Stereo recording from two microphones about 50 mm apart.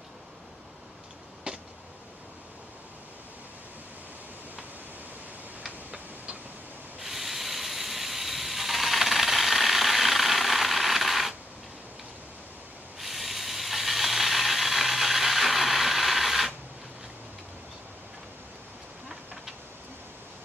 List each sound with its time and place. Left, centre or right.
1.5 s a sound: right
7.0 s ratchet: centre
13.0 s ratchet: centre